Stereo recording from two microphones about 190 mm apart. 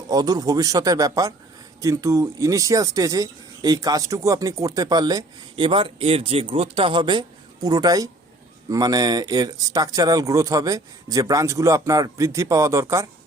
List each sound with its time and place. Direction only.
0.1 s speech: 20° right (ahead or behind)